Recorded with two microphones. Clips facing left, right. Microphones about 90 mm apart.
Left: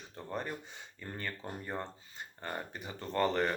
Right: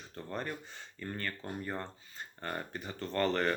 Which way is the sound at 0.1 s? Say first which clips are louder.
Even; 15° left (ahead or behind).